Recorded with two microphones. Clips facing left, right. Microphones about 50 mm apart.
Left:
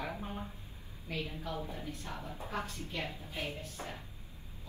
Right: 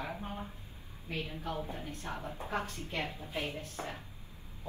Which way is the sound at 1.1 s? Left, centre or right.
Right.